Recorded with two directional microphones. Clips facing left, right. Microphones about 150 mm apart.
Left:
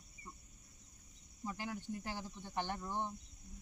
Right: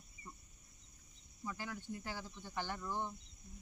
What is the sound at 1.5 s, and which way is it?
Speech, 15° left (ahead or behind).